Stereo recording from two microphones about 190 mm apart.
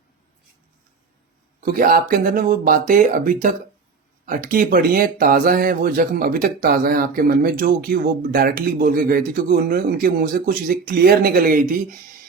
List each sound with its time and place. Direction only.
1.6 s speech: 50° right (ahead or behind)